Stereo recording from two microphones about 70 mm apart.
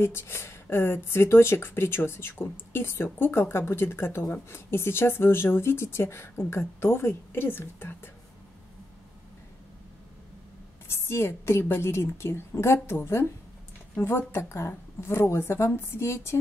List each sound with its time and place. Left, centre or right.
0.0 s speech: left
10.9 s speech: left